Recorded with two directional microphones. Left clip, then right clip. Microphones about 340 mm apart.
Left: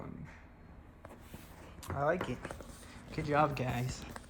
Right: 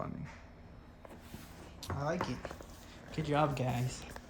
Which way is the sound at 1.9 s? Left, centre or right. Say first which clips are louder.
Left 4 dB; centre.